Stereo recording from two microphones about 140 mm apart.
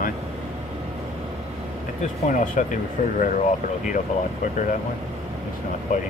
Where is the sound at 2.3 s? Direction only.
65° left (ahead or behind).